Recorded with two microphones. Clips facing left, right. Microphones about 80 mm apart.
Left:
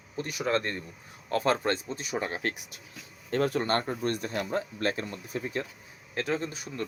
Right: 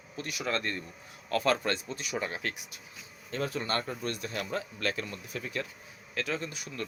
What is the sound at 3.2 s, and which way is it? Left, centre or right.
Speech, left.